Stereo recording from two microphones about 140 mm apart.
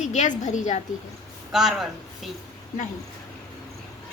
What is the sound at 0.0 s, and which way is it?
Speech, 60° left (ahead or behind).